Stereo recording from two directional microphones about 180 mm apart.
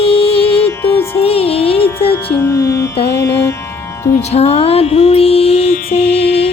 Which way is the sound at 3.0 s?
65° left (ahead or behind).